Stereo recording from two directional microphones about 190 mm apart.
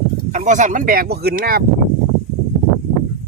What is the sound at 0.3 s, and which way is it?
Speech, 40° right (ahead or behind).